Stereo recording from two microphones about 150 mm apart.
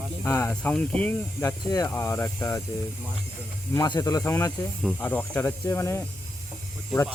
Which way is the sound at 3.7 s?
25° left (ahead or behind).